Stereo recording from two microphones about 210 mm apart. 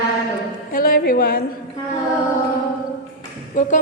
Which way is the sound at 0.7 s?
45° left (ahead or behind).